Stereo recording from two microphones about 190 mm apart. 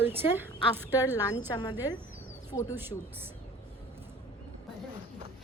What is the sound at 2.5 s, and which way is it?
Speech, 15° left (ahead or behind).